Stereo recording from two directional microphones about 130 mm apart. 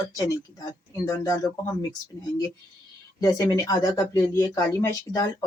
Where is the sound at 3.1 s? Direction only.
30° left (ahead or behind).